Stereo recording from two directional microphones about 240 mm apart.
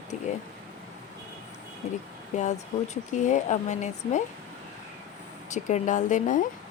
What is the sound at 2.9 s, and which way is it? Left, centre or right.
Speech, left.